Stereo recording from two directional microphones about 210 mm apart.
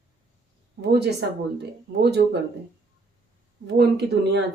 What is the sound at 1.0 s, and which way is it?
Speech, 50° right (ahead or behind).